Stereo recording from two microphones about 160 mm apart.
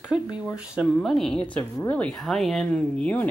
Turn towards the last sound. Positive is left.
turn(degrees=10)  # may be behind; listen again after turning